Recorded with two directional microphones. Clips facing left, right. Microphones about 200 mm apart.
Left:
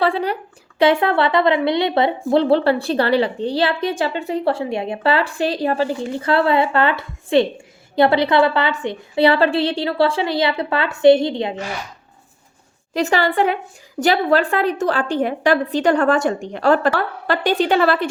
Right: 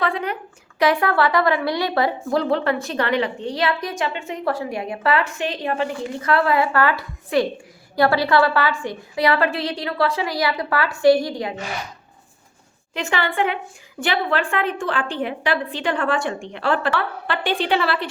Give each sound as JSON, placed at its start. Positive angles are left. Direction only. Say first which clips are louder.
{"t": 0.0, "sound": "a woman's voice", "louder": "left 5 dB", "side_deg": 35}
{"t": 12.9, "sound": "a woman's voice", "louder": "left 6 dB", "side_deg": 40}